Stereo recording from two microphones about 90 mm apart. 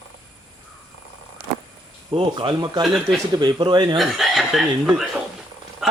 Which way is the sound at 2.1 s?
70° right (ahead or behind).